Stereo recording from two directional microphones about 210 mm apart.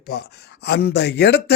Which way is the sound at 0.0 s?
50° left (ahead or behind).